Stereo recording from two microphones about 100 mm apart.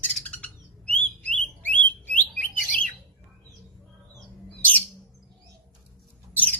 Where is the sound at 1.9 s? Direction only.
15° left (ahead or behind).